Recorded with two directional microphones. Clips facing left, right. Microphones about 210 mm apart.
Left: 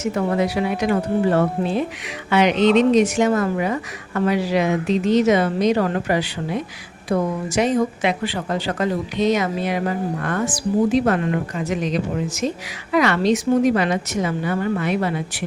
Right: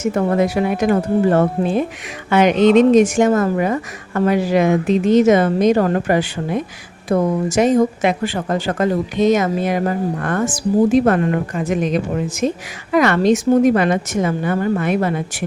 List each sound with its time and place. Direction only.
0.0 s speech: 50° right (ahead or behind)